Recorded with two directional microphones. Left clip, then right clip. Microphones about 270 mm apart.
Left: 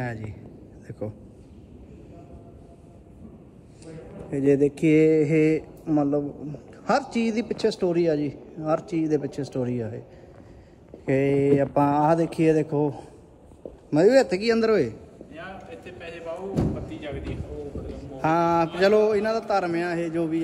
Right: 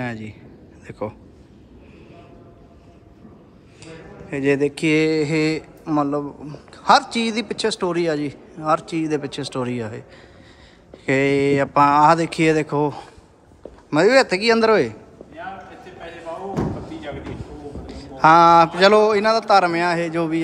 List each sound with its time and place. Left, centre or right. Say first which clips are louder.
0.0 s a man's voice: right 4 dB; centre
3.8 s speech: right 2 dB; centre
6.4 s a man's voice: right 9 dB; centre
11.1 s speech: right 4 dB; right
11.4 s a man's voice: right 5 dB; centre
13.8 s a man's voice: right 3 dB; centre
18.8 s a man's voice: right 6 dB; centre